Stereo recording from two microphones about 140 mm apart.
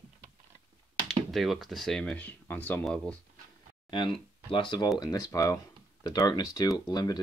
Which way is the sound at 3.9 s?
35° left (ahead or behind).